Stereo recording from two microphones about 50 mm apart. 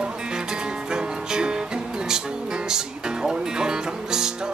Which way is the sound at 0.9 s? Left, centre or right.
Centre.